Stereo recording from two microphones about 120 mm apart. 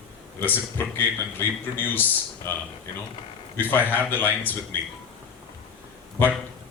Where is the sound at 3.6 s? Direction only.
15° left (ahead or behind).